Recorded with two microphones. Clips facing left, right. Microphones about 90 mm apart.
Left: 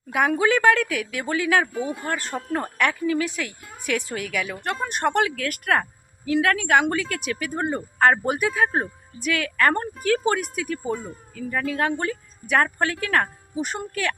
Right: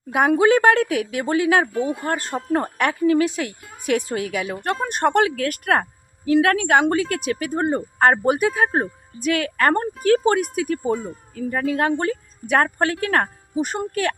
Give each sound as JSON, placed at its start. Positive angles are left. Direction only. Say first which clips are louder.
{"t": 0.1, "sound": "speech", "louder": "right 4 dB", "side_deg": -35}
{"t": 1.7, "sound": "speech", "louder": "right 5 dB", "side_deg": 0}
{"t": 2.0, "sound": "speech", "louder": "right 4 dB", "side_deg": -40}
{"t": 3.2, "sound": "speech", "louder": "right 5 dB", "side_deg": -35}
{"t": 10.9, "sound": "speech", "louder": "right 5 dB", "side_deg": 0}
{"t": 11.3, "sound": "speech", "louder": "right 3 dB", "side_deg": -45}